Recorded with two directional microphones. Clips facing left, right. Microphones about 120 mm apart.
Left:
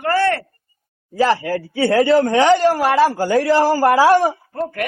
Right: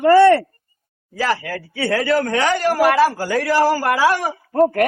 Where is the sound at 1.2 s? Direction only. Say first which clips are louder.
Left 5 dB; 30° left (ahead or behind).